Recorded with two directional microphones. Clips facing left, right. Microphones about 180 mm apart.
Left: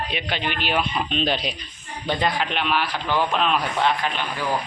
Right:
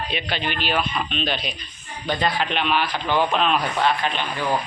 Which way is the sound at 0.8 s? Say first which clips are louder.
Left 2 dB; 25° left (ahead or behind).